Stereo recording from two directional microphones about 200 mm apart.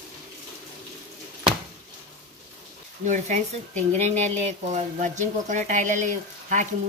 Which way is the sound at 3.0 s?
40° right (ahead or behind).